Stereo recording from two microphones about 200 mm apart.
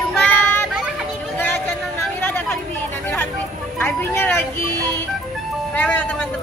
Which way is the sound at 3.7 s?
10° left (ahead or behind).